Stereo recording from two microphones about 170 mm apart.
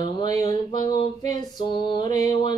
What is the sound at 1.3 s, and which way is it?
Music, 25° left (ahead or behind).